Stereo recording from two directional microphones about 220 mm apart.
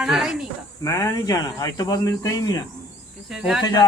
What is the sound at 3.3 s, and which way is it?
Speech, centre (ahead or behind).